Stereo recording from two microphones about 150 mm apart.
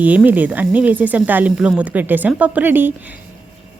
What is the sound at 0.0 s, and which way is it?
Speech, 10° right (ahead or behind).